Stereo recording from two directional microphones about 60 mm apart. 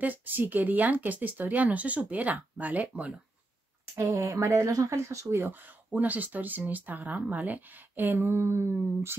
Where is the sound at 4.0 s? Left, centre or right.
Right.